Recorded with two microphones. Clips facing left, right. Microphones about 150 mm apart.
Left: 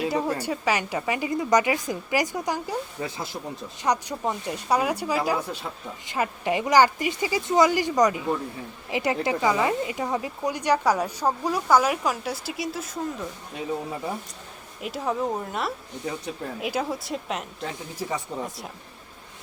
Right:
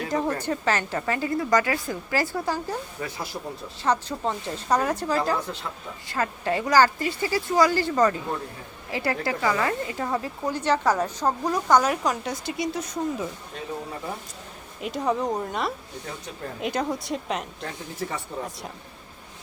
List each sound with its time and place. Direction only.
0.1 s a woman's voice: 10° left (ahead or behind)
14.8 s speech: centre (ahead or behind)
18.3 s speech: 20° left (ahead or behind)